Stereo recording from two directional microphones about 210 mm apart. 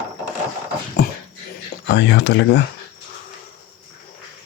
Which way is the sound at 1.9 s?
55° left (ahead or behind).